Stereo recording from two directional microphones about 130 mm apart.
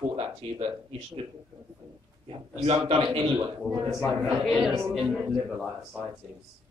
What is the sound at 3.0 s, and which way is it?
Speech, 35° right (ahead or behind).